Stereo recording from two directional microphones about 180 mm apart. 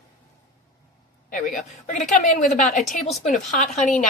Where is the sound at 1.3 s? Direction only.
50° left (ahead or behind).